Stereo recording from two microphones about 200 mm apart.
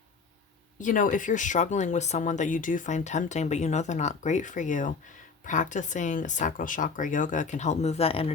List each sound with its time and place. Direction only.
0.8 s speech: 40° left (ahead or behind)